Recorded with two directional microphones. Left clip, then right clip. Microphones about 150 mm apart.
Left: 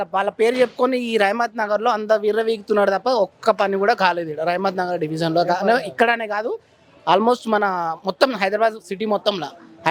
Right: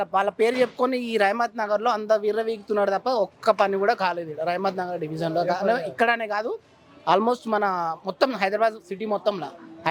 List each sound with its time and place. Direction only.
0.0 s speech: 15° left (ahead or behind)
8.9 s speech: 35° left (ahead or behind)